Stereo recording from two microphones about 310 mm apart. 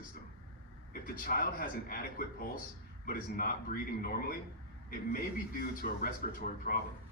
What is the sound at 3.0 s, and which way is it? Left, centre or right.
A man's voice, left.